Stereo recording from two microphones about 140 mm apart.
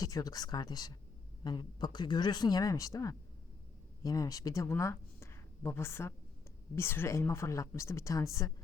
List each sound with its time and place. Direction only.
0.0 s speech: 25° left (ahead or behind)